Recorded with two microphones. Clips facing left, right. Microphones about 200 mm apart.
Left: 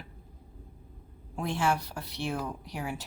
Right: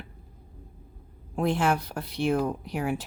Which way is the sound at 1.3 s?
55° right (ahead or behind).